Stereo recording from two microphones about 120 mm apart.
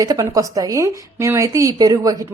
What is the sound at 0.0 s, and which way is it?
A woman's voice, 30° right (ahead or behind).